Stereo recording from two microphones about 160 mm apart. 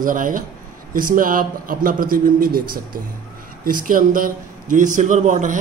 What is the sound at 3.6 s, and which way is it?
A man's voice, 60° right (ahead or behind).